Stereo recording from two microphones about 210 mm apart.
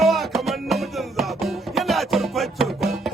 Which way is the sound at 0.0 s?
Centre (ahead or behind).